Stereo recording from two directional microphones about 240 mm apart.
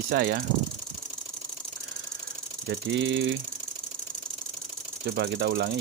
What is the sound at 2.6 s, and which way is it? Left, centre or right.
Speech, right.